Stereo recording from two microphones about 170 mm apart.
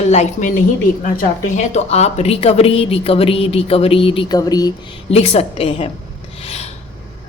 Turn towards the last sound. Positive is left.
turn(degrees=40)  # may be behind; listen again after turning